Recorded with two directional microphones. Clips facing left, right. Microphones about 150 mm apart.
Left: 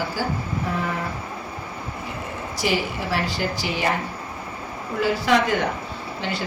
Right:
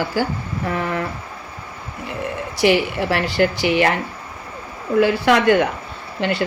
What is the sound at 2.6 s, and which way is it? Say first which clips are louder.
Speech: right 8 dB; 65° right (ahead or behind).